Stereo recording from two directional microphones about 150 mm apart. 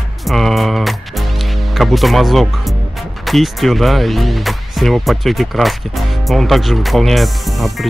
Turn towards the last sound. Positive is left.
turn(degrees=0)  # may be behind; listen again after turning